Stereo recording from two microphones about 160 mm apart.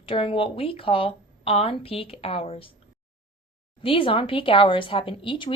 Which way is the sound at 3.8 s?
35° left (ahead or behind).